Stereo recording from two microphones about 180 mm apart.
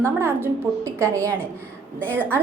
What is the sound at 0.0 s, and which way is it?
A woman's voice, 15° right (ahead or behind).